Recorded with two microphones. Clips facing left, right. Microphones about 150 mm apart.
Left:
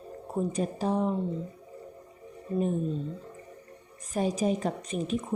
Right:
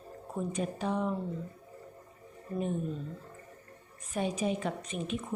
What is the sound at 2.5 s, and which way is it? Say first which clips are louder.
Speech: left 6 dB; 20° left (ahead or behind).